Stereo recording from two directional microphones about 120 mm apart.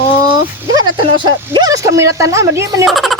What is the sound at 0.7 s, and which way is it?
Speech, 40° right (ahead or behind).